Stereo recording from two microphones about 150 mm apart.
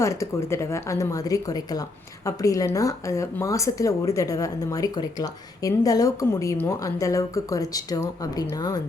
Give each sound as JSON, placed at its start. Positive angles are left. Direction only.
{"t": 0.0, "sound": "speech", "side_deg": 20}